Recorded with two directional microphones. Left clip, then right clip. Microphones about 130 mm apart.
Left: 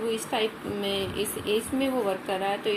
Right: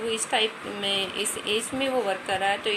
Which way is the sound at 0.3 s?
15° right (ahead or behind).